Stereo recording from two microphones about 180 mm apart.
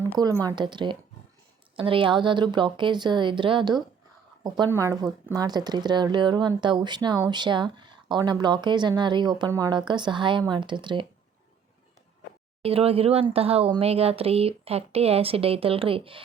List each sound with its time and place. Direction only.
0.0 s speech: 20° right (ahead or behind)
12.6 s speech: 35° right (ahead or behind)